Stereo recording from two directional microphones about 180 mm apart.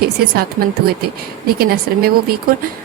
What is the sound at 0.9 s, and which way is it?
Speech, 60° right (ahead or behind).